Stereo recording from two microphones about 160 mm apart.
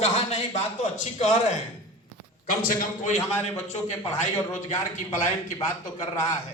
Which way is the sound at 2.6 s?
55° left (ahead or behind).